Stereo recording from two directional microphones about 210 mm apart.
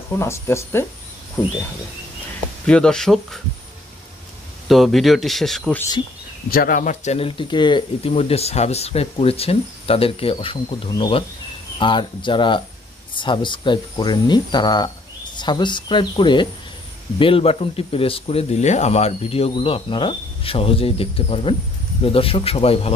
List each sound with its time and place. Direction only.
0.1 s speech: 15° left (ahead or behind)
2.6 s speech: 5° left (ahead or behind)
4.6 s speech: centre (ahead or behind)
6.5 s speech: 40° left (ahead or behind)